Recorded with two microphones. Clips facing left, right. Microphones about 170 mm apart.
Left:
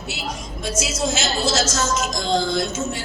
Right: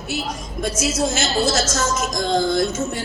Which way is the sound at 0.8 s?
55° right (ahead or behind).